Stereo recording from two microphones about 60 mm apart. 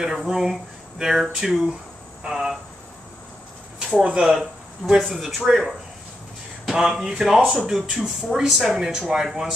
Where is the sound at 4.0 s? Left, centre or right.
Centre.